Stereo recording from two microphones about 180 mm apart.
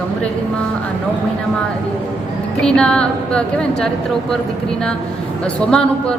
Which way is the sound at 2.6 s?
5° left (ahead or behind).